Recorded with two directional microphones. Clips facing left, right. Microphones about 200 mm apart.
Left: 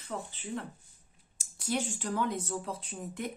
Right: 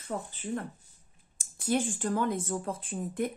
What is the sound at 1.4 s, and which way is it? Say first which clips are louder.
Speech: right 4 dB; 50° right (ahead or behind).